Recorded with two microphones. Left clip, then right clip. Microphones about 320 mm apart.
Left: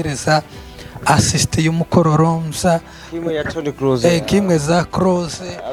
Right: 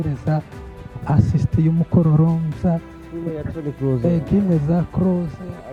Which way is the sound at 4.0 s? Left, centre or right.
Centre.